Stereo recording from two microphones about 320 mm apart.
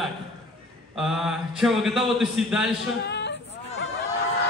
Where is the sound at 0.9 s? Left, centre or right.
Centre.